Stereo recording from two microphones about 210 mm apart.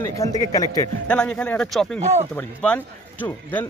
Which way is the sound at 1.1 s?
5° left (ahead or behind).